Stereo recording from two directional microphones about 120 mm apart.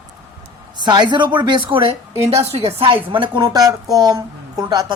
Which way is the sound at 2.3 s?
60° right (ahead or behind).